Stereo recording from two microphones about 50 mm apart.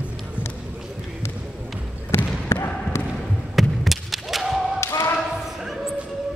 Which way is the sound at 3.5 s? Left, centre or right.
Centre.